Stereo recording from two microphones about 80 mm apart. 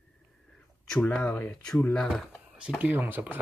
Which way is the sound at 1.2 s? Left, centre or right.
Centre.